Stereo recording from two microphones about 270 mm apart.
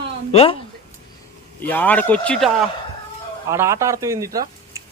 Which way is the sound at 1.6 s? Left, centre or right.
Centre.